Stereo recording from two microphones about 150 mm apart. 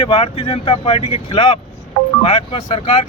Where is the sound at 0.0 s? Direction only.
35° left (ahead or behind).